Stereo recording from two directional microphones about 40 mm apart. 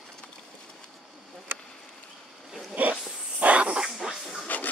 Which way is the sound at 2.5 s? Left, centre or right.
Centre.